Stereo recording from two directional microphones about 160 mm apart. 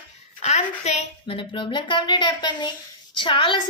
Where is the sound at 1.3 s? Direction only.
30° left (ahead or behind).